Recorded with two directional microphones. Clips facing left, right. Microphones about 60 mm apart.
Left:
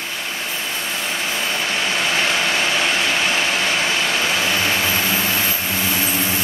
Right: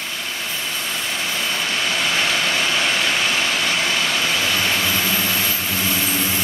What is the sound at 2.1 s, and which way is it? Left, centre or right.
Vehicle, left.